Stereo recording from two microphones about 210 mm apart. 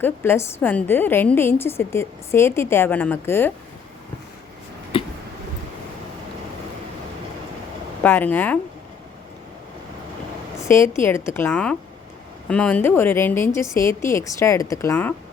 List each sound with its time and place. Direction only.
0.0 s a woman's voice: 10° left (ahead or behind)
4.9 s a sound: 25° left (ahead or behind)
8.0 s a woman's voice: 10° left (ahead or behind)
10.6 s a woman's voice: 15° left (ahead or behind)